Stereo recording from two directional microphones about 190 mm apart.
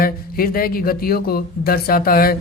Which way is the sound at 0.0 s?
50° left (ahead or behind).